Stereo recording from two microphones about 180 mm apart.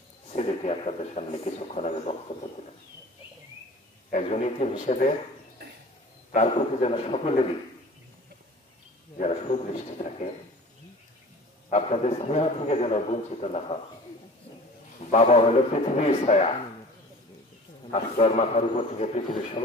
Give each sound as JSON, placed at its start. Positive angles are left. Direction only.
{"t": 0.3, "sound": "speech", "side_deg": 35}
{"t": 4.1, "sound": "speech", "side_deg": 40}
{"t": 6.3, "sound": "speech", "side_deg": 35}
{"t": 9.2, "sound": "speech", "side_deg": 35}
{"t": 11.7, "sound": "speech", "side_deg": 35}
{"t": 15.0, "sound": "speech", "side_deg": 40}
{"t": 17.9, "sound": "speech", "side_deg": 40}